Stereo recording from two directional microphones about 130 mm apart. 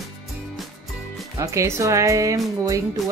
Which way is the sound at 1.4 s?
25° right (ahead or behind).